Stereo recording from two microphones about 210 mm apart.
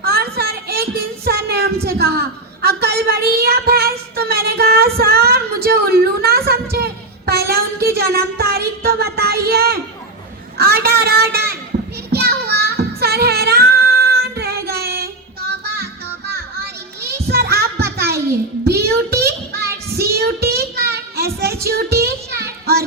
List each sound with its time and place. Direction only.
0.0 s a child's voice: 45° right (ahead or behind)
12.1 s child singing: 50° right (ahead or behind)
17.0 s children playing: 50° right (ahead or behind)
18.6 s child singing: 50° right (ahead or behind)
22.0 s a sound: 50° right (ahead or behind)